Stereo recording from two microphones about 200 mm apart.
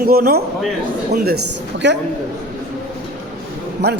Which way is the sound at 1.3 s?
75° right (ahead or behind).